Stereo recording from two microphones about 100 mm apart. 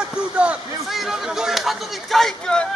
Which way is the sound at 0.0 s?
10° right (ahead or behind).